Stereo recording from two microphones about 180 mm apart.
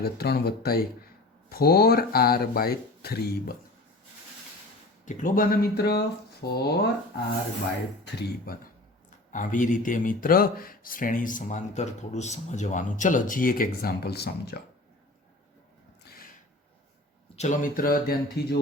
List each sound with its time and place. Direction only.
0.0 s speech: 60° left (ahead or behind)
5.0 s speech: 45° left (ahead or behind); by 6.9 s 65° left (ahead or behind)
9.3 s speech: 45° left (ahead or behind); by 14.6 s 65° left (ahead or behind)
17.3 s speech: 40° left (ahead or behind); by 18.6 s 60° left (ahead or behind)